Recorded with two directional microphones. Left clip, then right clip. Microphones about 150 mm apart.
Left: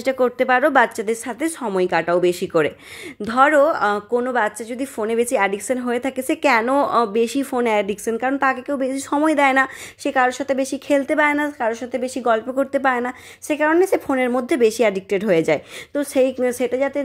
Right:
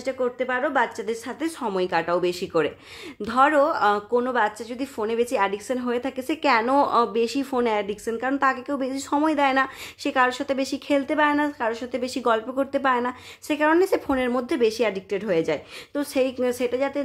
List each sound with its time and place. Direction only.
0.0 s a woman's voice: 60° left (ahead or behind)
1.4 s a woman's voice: 25° left (ahead or behind)
6.6 s a woman's voice: 20° left (ahead or behind); by 16.0 s 45° left (ahead or behind)
16.0 s speech: 30° left (ahead or behind)